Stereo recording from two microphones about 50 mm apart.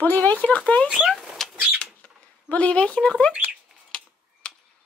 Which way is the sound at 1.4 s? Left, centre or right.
Centre.